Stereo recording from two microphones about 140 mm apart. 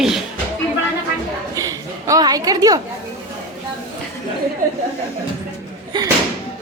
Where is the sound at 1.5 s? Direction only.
25° right (ahead or behind).